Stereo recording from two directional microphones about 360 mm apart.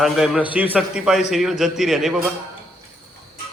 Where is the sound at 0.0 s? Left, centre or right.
Centre.